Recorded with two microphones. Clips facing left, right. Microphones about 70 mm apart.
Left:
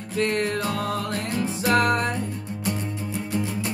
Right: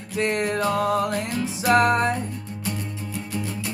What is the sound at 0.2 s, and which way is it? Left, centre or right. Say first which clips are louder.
Music: right 1 dB; centre.